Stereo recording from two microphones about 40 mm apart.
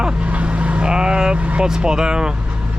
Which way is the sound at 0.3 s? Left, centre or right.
Right.